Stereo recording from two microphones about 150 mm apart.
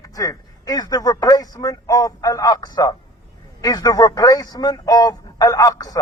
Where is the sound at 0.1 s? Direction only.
25° left (ahead or behind).